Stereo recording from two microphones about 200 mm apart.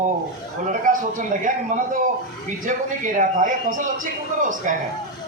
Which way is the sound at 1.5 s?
40° right (ahead or behind).